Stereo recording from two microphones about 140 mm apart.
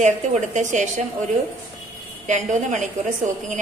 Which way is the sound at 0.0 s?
60° right (ahead or behind).